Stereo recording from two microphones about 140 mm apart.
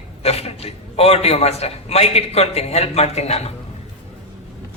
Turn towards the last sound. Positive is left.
turn(degrees=50)  # may be behind; listen again after turning